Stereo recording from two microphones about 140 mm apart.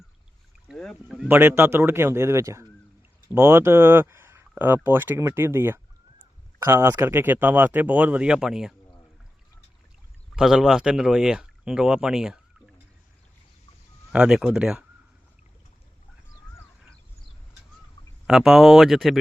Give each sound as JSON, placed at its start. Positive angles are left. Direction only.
{"t": 0.7, "sound": "speech", "side_deg": 5}
{"t": 1.3, "sound": "speech", "side_deg": -15}
{"t": 10.3, "sound": "speech", "side_deg": -5}
{"t": 14.1, "sound": "speech", "side_deg": -5}
{"t": 18.3, "sound": "speech", "side_deg": 0}